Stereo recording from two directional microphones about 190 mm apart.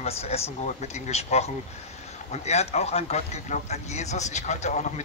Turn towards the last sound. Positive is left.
turn(degrees=35)  # may be behind; listen again after turning